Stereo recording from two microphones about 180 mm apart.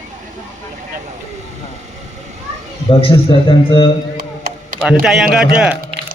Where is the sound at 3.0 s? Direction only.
30° left (ahead or behind).